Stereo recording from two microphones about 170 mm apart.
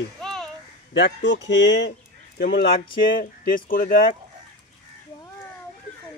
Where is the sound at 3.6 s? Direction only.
55° left (ahead or behind).